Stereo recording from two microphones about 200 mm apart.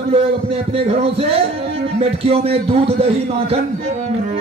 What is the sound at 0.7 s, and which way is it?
A man's voice, 30° right (ahead or behind).